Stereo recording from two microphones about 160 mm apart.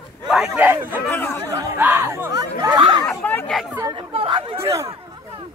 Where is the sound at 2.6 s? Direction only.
25° right (ahead or behind).